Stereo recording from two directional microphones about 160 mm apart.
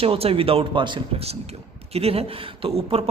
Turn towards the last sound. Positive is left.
turn(degrees=-40)  # may be behind; listen again after turning